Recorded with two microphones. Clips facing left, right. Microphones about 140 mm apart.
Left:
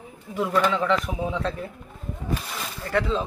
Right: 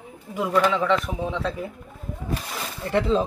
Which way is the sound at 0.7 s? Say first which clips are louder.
Right 1 dB; centre (ahead or behind).